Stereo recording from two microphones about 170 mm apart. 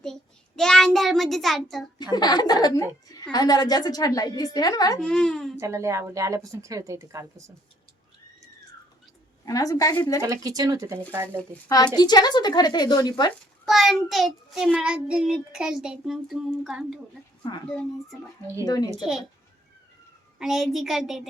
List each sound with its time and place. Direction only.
0.0 s a child's voice: 5° left (ahead or behind)
2.1 s a woman's voice: 25° left (ahead or behind)
4.9 s child singing: 5° left (ahead or behind)
5.5 s a woman's voice: 15° right (ahead or behind)
9.5 s a woman's voice: 20° left (ahead or behind)
10.2 s speech: 20° right (ahead or behind)
11.9 s a woman's voice: 25° left (ahead or behind)
13.7 s child singing: centre (ahead or behind)
18.6 s a woman's voice: 20° left (ahead or behind)
20.4 s child singing: centre (ahead or behind)